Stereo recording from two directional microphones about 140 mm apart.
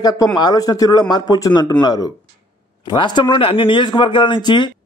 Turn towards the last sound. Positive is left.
turn(degrees=35)  # may be behind; listen again after turning